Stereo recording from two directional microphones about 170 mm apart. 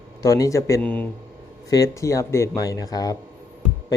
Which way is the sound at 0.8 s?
10° left (ahead or behind).